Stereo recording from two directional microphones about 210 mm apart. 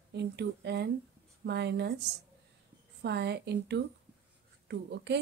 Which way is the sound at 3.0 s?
55° right (ahead or behind).